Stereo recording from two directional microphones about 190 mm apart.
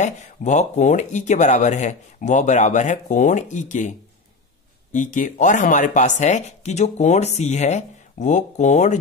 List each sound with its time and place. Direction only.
0.0 s speech: 35° left (ahead or behind)
4.9 s speech: 40° left (ahead or behind)